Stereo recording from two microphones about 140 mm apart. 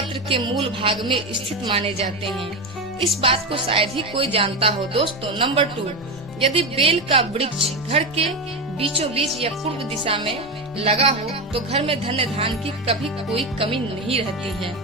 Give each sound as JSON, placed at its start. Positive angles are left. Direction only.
{"t": 0.1, "sound": "music", "side_deg": -35}
{"t": 6.5, "sound": "speech", "side_deg": -40}
{"t": 10.0, "sound": "music", "side_deg": -40}
{"t": 10.8, "sound": "speech", "side_deg": -45}
{"t": 11.5, "sound": "music", "side_deg": -45}